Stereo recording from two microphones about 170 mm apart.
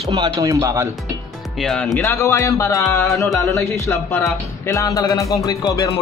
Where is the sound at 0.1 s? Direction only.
25° right (ahead or behind).